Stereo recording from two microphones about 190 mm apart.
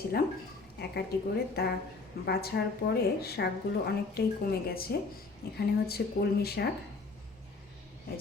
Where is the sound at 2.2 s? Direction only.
55° left (ahead or behind).